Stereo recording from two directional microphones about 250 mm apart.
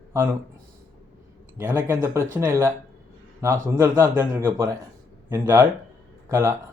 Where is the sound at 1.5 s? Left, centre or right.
Centre.